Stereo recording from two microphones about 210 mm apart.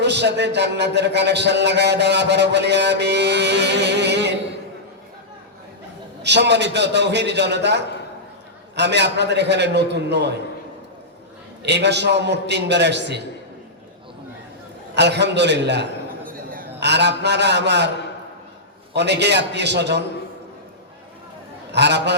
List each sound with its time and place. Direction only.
0.0 s speech: 55° right (ahead or behind)
6.2 s speech: 55° right (ahead or behind)
11.6 s speech: 55° right (ahead or behind)
14.9 s a man's voice: 55° right (ahead or behind)
18.9 s speech: 55° right (ahead or behind)
21.7 s a man's voice: 55° right (ahead or behind)